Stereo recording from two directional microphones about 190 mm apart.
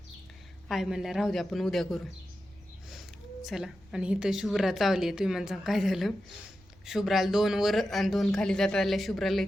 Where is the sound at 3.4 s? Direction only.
Centre (ahead or behind).